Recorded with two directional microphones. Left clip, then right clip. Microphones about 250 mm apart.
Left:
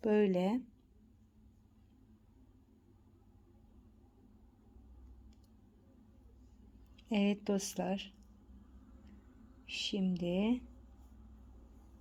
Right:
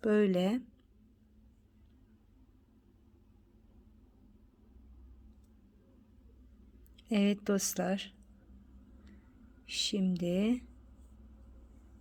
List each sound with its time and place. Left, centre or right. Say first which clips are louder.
0.0 s speech: right 2 dB; centre
6.9 s speech: right 3 dB; centre
9.6 s speech: right 4 dB; centre